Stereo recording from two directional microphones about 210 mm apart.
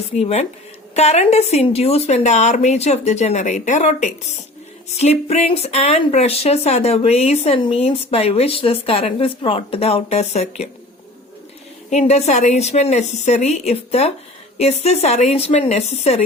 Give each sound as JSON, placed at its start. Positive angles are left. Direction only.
{"t": 0.2, "sound": "speech", "side_deg": 30}
{"t": 11.9, "sound": "speech", "side_deg": 30}